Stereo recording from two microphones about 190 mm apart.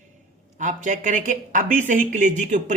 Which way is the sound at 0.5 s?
40° right (ahead or behind).